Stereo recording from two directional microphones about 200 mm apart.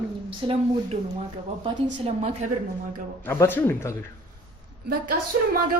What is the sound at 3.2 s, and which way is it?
Speech, 10° left (ahead or behind).